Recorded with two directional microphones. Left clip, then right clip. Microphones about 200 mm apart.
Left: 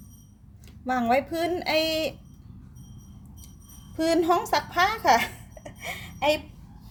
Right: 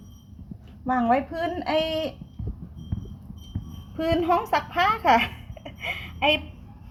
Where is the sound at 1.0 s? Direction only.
35° left (ahead or behind).